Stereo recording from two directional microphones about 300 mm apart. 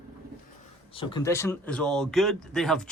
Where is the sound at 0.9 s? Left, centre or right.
Centre.